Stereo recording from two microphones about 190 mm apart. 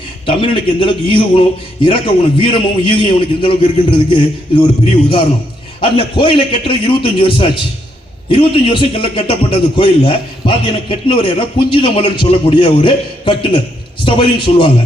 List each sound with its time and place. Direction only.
0.3 s a man's voice: 25° left (ahead or behind)